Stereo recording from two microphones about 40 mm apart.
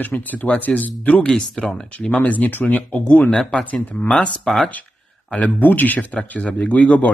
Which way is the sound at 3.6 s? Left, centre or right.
Left.